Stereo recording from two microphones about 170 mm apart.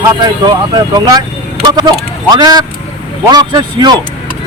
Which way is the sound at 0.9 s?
20° right (ahead or behind).